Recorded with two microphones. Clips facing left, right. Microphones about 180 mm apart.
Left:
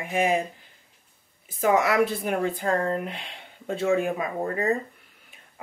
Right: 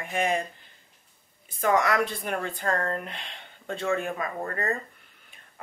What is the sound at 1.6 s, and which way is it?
Speech, 5° left (ahead or behind).